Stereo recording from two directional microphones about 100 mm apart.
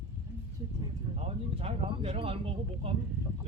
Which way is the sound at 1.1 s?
90° right.